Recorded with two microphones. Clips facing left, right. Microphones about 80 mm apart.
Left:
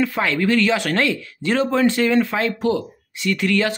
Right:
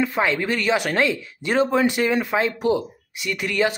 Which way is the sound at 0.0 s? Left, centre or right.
Right.